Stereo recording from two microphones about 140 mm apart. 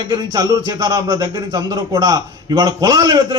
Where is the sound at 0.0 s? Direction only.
30° right (ahead or behind).